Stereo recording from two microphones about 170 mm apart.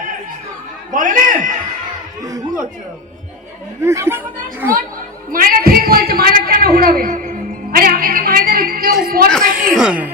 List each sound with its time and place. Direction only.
0.9 s a man's voice: 50° right (ahead or behind)
2.2 s speech: 20° right (ahead or behind)
3.8 s speech: 15° right (ahead or behind)
5.3 s a sound: 55° right (ahead or behind)
9.0 s speech: 60° right (ahead or behind)
9.3 s a woman's voice: 5° left (ahead or behind)